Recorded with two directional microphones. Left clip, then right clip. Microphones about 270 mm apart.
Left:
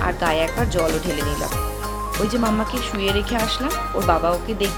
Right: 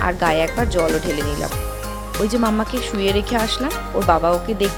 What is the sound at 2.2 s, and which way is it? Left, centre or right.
Speech, right.